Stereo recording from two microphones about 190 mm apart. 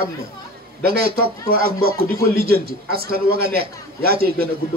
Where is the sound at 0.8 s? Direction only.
55° right (ahead or behind).